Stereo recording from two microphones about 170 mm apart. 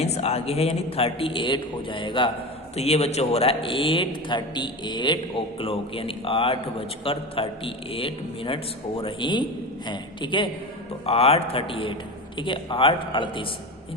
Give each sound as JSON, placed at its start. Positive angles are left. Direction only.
{"t": 0.0, "sound": "a man's voice", "side_deg": 35}